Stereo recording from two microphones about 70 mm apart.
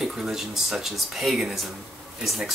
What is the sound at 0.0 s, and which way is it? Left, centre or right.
Speech, centre.